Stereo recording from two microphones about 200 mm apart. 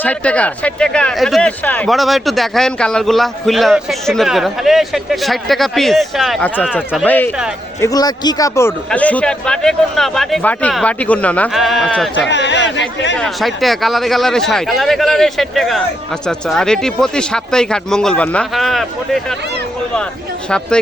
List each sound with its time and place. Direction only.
0.0 s a man's voice: 5° left (ahead or behind)
12.3 s speech: 60° left (ahead or behind)
13.1 s speech: centre (ahead or behind)